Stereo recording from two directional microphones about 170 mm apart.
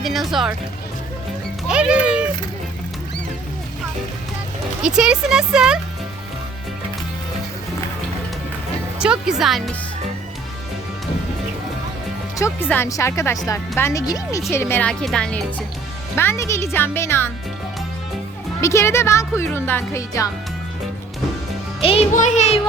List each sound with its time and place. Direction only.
0.0 s speech: centre (ahead or behind)
1.6 s music: 5° right (ahead or behind)
4.9 s speech: 5° right (ahead or behind)
9.0 s speech: 5° right (ahead or behind)
12.4 s speech: 10° left (ahead or behind)
18.6 s speech: 15° left (ahead or behind)
21.8 s speech: 35° left (ahead or behind)
22.1 s speech: 45° left (ahead or behind)